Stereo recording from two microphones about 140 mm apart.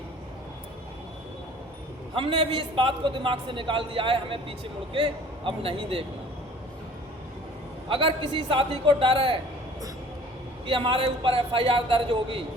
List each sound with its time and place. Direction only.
2.1 s a man's voice: 35° right (ahead or behind)
7.9 s a man's voice: 40° right (ahead or behind)
10.7 s a man's voice: 35° right (ahead or behind)